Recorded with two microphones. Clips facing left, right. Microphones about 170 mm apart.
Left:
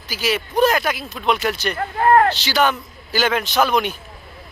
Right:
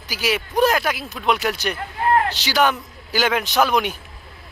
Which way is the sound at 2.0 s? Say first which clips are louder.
Left 5 dB; 50° left (ahead or behind).